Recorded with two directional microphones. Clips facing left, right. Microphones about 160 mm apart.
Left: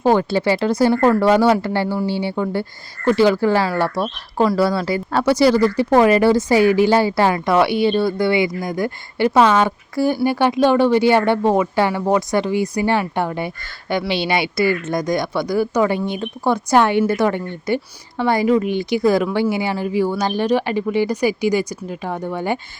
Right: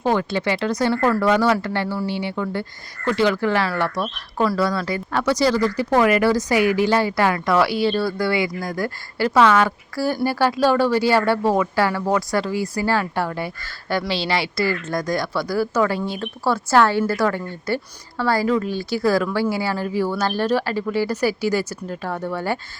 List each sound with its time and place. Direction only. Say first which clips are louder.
0.0 s speech: left 5 dB; 35° left (ahead or behind); by 22.5 s 15° left (ahead or behind)